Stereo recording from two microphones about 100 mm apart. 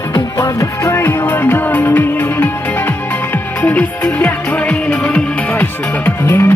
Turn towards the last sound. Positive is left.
turn(degrees=25)  # may be behind; listen again after turning